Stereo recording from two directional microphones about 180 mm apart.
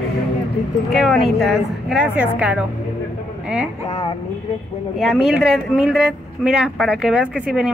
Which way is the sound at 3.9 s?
25° left (ahead or behind).